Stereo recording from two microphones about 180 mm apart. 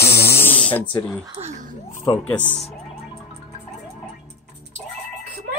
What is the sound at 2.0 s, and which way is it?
Speech, 10° left (ahead or behind).